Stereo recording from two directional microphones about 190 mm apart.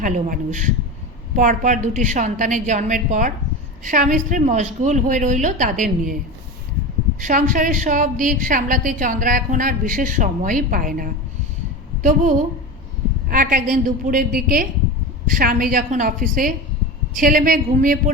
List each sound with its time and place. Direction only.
0.0 s a woman's voice: 40° right (ahead or behind)
7.2 s a woman's voice: 45° right (ahead or behind)
13.3 s a woman's voice: 45° right (ahead or behind)